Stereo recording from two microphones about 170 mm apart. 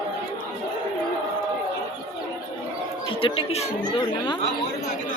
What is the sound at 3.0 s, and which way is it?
Speech, 35° left (ahead or behind).